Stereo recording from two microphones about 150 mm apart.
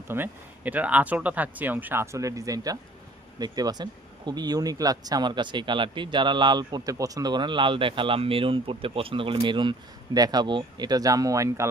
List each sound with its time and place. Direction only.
0.1 s speech: 10° right (ahead or behind)